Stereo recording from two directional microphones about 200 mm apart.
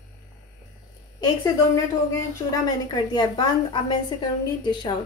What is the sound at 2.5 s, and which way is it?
A woman's voice, 20° left (ahead or behind).